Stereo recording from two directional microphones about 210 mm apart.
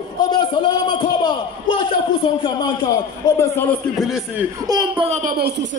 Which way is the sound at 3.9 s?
Centre (ahead or behind).